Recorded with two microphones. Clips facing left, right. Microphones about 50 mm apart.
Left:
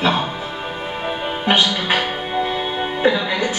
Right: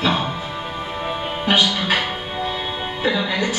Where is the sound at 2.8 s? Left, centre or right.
Centre.